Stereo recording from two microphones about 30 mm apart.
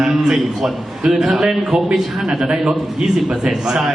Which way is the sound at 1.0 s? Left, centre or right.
Centre.